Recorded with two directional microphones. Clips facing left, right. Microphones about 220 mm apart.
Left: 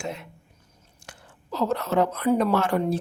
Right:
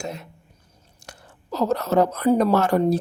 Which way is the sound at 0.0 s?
40° right (ahead or behind).